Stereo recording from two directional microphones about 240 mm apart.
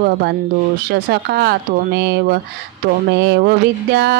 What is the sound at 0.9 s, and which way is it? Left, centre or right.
Speech, right.